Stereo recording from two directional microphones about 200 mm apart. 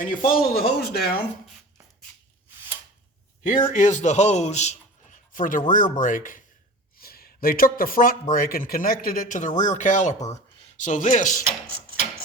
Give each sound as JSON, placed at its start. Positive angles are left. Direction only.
{"t": 0.0, "sound": "speech", "side_deg": 45}
{"t": 3.7, "sound": "a man's voice", "side_deg": 40}